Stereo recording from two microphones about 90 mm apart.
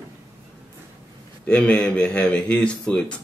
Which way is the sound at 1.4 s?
10° left (ahead or behind).